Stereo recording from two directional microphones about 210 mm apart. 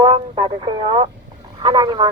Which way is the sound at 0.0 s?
25° right (ahead or behind).